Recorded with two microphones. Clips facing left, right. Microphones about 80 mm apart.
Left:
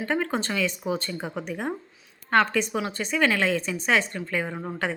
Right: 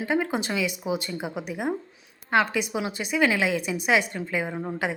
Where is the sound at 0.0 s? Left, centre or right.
Centre.